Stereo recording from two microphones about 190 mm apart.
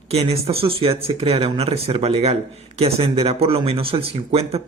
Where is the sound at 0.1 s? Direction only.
35° right (ahead or behind).